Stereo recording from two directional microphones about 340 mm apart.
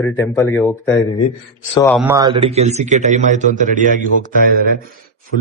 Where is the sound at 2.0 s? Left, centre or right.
Centre.